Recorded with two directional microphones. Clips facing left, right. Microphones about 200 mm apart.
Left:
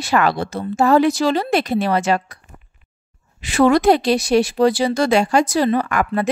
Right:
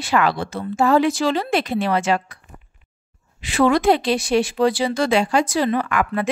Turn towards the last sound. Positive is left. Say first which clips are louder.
# left 2 dB
turn(degrees=40)  # may be behind; listen again after turning